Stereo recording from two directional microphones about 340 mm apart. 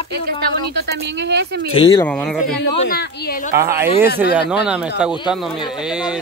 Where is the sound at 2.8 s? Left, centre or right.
Left.